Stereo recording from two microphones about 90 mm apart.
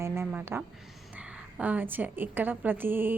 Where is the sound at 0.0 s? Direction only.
30° right (ahead or behind).